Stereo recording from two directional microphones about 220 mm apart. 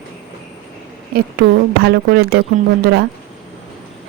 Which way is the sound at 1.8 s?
45° right (ahead or behind).